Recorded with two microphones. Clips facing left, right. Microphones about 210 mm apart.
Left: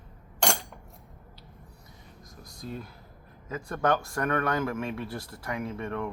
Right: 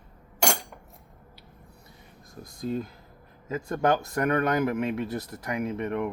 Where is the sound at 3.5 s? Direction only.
20° right (ahead or behind).